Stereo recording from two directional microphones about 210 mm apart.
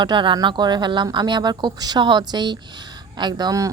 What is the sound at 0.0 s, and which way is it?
Speech, 20° right (ahead or behind).